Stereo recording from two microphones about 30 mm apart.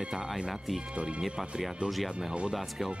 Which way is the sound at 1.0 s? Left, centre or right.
Right.